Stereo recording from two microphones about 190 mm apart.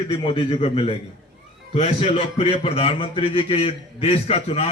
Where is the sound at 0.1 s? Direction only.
25° left (ahead or behind).